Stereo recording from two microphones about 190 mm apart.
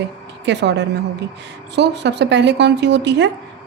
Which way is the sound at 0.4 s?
65° right (ahead or behind).